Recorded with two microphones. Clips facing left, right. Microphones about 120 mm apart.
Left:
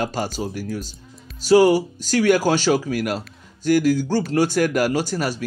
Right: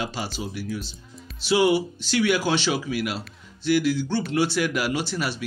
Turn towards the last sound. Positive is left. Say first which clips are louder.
# left 4 dB
turn(degrees=45)  # may be behind; listen again after turning